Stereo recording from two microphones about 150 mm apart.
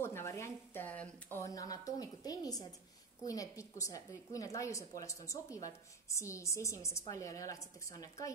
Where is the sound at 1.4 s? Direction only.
25° left (ahead or behind).